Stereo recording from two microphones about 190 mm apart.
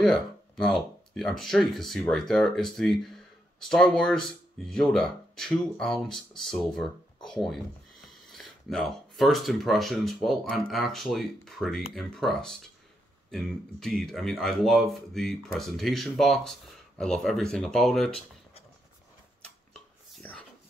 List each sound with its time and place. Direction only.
0.0 s speech: 5° left (ahead or behind)
19.7 s whispering: 5° left (ahead or behind)